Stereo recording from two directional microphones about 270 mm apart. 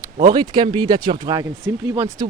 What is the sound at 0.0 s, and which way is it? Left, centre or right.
Speech, centre.